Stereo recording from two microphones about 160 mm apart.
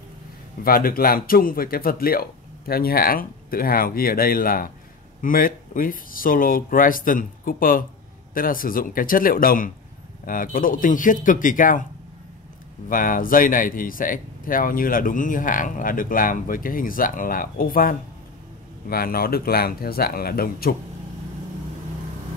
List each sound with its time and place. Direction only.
0.7 s speech: 65° left (ahead or behind)
12.8 s speech: 60° left (ahead or behind)